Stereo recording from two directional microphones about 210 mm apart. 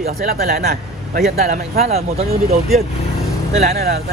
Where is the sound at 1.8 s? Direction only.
30° right (ahead or behind).